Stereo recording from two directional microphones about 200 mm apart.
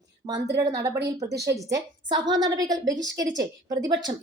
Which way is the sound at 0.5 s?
15° right (ahead or behind).